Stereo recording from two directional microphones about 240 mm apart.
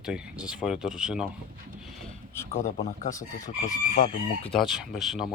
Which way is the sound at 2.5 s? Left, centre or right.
Left.